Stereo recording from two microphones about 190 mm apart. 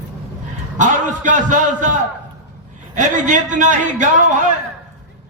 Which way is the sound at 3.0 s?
40° right (ahead or behind).